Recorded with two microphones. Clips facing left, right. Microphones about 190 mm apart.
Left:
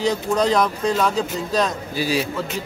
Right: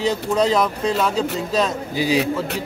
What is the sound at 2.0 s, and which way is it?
Speech, 20° right (ahead or behind).